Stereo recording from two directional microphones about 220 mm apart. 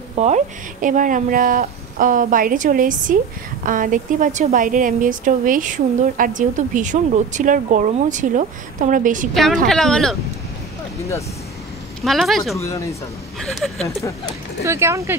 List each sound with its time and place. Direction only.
0.2 s a woman's voice: 35° right (ahead or behind)
9.3 s speech: centre (ahead or behind)
12.0 s speech: centre (ahead or behind)
12.5 s speech: 15° left (ahead or behind)
13.4 s speech: centre (ahead or behind)
13.8 s speech: 15° left (ahead or behind)
14.6 s speech: 10° right (ahead or behind)